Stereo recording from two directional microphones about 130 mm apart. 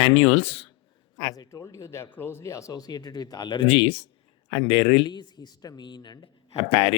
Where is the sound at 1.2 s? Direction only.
30° left (ahead or behind).